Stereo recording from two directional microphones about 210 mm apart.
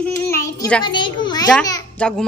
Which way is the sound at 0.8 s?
20° left (ahead or behind).